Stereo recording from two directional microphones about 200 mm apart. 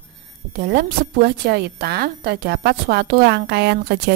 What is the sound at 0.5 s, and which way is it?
A woman's voice, 50° right (ahead or behind).